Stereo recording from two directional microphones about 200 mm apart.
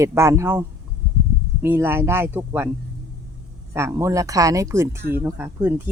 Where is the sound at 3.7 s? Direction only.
15° right (ahead or behind).